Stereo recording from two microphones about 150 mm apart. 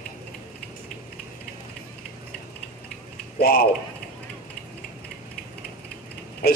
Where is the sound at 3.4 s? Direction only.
90° left.